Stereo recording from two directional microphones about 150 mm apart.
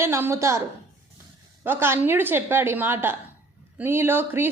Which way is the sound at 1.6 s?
15° right (ahead or behind).